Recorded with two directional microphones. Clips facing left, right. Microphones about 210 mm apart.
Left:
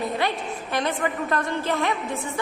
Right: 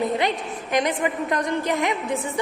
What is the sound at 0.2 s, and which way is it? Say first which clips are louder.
A woman's voice: right 2 dB; 20° right (ahead or behind).